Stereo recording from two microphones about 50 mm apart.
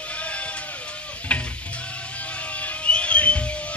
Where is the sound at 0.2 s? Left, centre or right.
Left.